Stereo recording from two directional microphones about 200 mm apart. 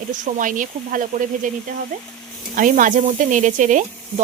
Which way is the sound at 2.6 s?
40° right (ahead or behind).